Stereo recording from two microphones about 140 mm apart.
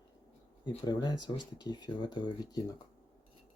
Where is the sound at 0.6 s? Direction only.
30° left (ahead or behind).